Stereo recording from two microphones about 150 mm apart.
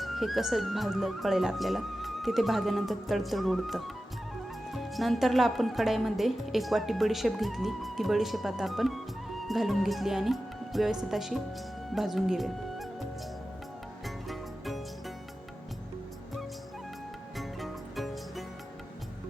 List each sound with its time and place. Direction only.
0.0 s speech: centre (ahead or behind)
14.3 s music: centre (ahead or behind)
17.3 s music: centre (ahead or behind)